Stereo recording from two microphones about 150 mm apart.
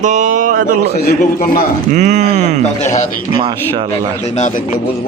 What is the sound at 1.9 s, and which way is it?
Speech, 55° right (ahead or behind).